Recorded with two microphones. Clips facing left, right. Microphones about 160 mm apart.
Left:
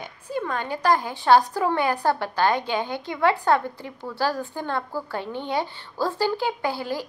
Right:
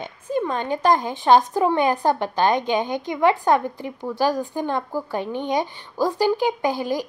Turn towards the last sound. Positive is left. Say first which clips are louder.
# right 4 dB
turn(degrees=-15)  # may be behind; listen again after turning